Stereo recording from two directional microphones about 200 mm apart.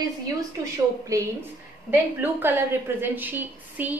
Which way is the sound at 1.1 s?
15° right (ahead or behind).